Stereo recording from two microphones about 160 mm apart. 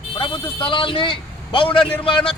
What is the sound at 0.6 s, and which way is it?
A man's voice, 30° left (ahead or behind).